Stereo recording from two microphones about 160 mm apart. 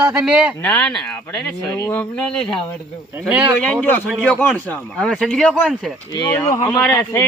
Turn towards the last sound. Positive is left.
turn(degrees=20)  # may be behind; listen again after turning